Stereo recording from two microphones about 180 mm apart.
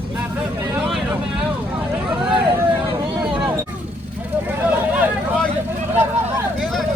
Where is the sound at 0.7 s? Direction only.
Centre (ahead or behind).